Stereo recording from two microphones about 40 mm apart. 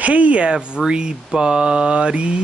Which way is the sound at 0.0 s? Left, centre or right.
Right.